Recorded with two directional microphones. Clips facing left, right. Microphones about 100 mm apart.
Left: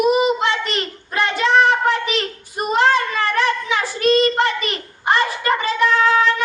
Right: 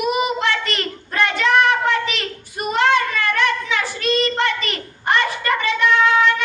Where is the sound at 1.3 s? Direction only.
30° left (ahead or behind).